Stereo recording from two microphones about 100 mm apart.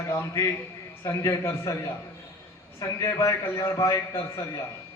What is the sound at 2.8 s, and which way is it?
A man's voice, 30° left (ahead or behind).